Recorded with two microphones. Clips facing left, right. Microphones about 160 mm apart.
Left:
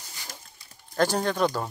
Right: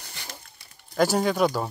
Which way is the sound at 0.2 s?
65° right (ahead or behind).